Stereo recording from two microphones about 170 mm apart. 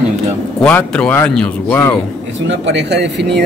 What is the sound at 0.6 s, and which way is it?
Speech, 10° left (ahead or behind).